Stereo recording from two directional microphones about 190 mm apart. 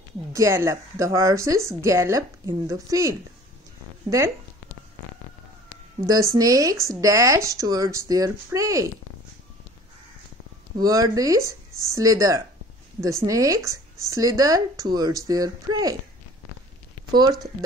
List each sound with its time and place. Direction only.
0.3 s speech: 15° right (ahead or behind)
5.9 s speech: 15° right (ahead or behind)
10.8 s speech: 20° right (ahead or behind)
17.1 s speech: 20° right (ahead or behind)